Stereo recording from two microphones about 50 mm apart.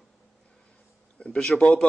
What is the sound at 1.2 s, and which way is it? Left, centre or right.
Speech, centre.